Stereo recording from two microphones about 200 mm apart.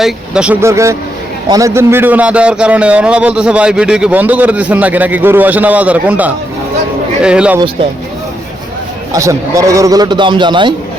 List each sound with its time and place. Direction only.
0.0 s a man's voice: 5° right (ahead or behind)
9.1 s a man's voice: 15° right (ahead or behind)